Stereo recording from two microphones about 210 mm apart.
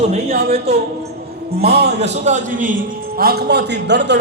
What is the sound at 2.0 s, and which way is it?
Speech, 35° right (ahead or behind).